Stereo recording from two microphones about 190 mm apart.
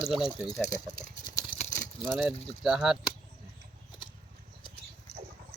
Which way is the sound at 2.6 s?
5° right (ahead or behind).